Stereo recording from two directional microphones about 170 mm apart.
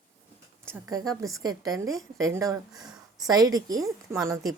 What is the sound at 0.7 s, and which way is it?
A woman's voice, 20° right (ahead or behind).